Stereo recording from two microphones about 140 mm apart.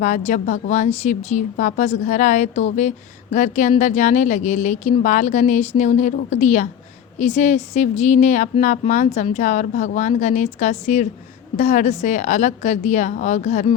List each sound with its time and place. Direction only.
0.0 s speech: 60° left (ahead or behind)